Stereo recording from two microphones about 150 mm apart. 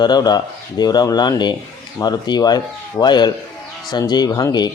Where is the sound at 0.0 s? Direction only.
30° left (ahead or behind).